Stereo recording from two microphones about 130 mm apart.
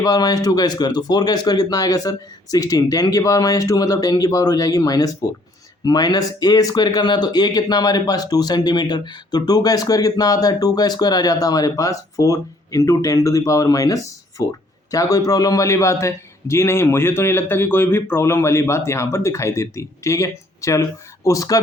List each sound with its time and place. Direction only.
0.0 s speech: 30° left (ahead or behind)